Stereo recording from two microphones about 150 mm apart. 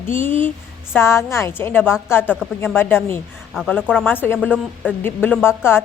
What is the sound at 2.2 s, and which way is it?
Speech, 5° right (ahead or behind).